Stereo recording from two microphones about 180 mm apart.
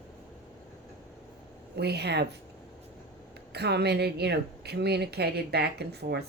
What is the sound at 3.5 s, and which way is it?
Speech, 65° right (ahead or behind).